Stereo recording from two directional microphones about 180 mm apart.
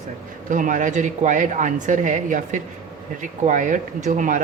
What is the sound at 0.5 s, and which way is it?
Speech, 45° right (ahead or behind).